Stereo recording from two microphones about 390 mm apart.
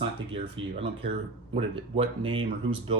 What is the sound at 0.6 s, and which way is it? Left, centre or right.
Speech, right.